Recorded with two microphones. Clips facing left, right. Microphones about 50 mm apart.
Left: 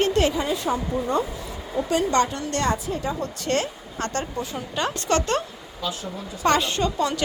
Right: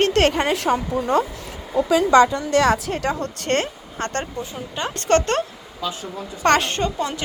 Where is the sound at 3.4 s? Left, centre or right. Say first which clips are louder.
Right 3 dB; right.